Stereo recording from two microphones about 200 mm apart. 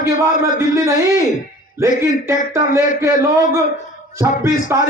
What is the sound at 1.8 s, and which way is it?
A man's voice, 15° right (ahead or behind).